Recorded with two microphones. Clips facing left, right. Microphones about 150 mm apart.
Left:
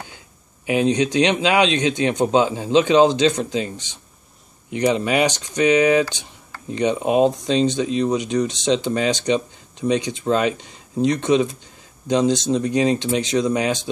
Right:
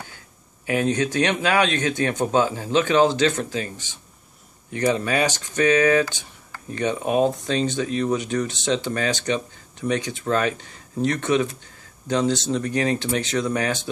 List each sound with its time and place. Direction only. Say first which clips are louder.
0.7 s speech: left 3 dB; 20° left (ahead or behind)